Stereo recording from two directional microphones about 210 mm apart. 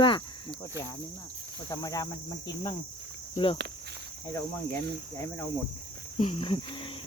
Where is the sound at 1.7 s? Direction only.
15° left (ahead or behind).